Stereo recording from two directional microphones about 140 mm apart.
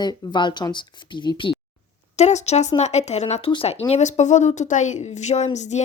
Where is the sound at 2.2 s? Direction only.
55° left (ahead or behind).